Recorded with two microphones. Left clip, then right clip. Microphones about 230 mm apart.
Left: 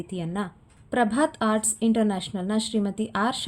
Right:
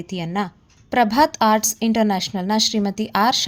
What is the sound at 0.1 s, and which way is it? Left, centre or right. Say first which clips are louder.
A woman's voice: right 9 dB; right.